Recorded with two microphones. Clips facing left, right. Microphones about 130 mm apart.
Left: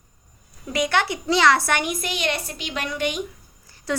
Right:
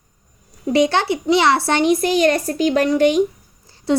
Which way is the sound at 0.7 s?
30° right (ahead or behind).